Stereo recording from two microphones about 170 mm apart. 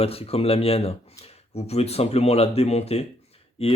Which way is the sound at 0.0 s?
35° left (ahead or behind).